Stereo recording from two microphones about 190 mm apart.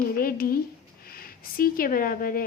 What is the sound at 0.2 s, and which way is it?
A woman's voice, 50° left (ahead or behind).